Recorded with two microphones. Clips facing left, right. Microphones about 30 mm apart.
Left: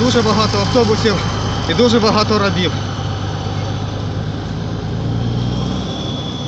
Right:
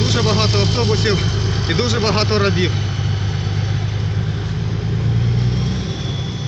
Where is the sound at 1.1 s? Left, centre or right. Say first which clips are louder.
Left 2 dB; left.